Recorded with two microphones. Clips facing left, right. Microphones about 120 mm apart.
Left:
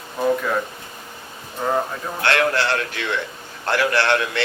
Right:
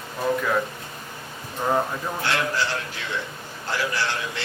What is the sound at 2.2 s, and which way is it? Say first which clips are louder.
Speech: left 7 dB; 70° left (ahead or behind).